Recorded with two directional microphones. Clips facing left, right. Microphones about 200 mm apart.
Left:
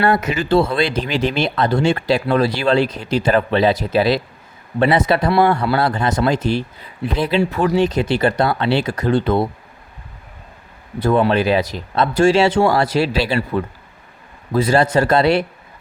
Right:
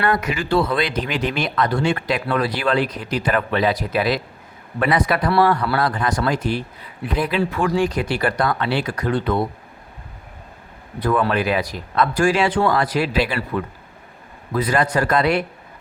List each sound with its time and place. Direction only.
0.0 s speech: 25° left (ahead or behind)
11.0 s speech: 25° left (ahead or behind)